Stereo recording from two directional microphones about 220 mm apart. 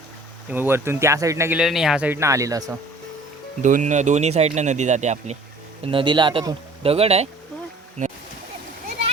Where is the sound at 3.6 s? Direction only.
35° right (ahead or behind).